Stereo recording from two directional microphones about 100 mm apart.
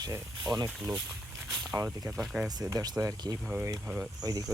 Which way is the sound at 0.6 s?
10° right (ahead or behind).